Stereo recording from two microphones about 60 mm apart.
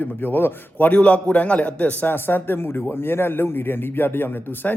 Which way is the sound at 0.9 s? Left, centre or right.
Left.